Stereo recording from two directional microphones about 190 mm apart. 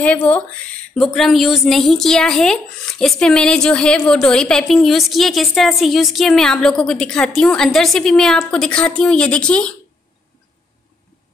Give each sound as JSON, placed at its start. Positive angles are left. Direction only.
{"t": 0.0, "sound": "a woman's voice", "side_deg": 5}